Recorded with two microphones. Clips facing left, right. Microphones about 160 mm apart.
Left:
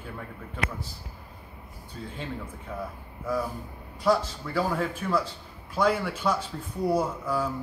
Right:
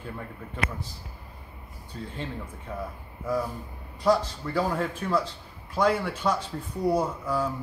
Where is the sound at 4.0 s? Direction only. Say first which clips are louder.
Right 1 dB; 5° left (ahead or behind).